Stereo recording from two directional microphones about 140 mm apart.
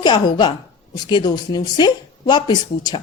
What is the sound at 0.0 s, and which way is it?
Speech, 30° left (ahead or behind).